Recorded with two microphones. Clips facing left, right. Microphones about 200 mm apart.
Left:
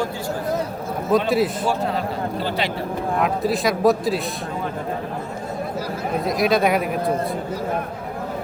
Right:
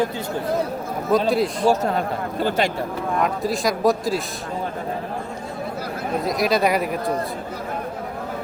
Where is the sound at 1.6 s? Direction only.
45° right (ahead or behind).